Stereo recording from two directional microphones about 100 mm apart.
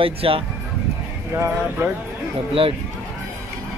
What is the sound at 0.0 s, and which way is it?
Speech, 65° right (ahead or behind).